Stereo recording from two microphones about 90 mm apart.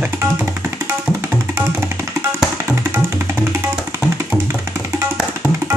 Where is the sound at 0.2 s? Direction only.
30° right (ahead or behind).